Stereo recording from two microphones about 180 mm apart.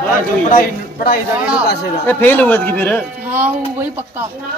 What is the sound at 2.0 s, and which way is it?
Speech, 10° left (ahead or behind).